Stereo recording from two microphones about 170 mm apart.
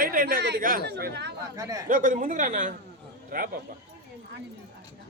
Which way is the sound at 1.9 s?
50° right (ahead or behind).